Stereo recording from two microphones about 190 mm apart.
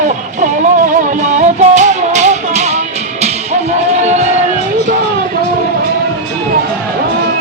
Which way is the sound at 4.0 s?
35° right (ahead or behind).